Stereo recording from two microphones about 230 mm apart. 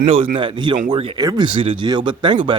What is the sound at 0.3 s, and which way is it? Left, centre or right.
Speech, centre.